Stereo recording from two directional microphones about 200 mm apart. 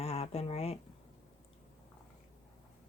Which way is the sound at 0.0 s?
30° left (ahead or behind).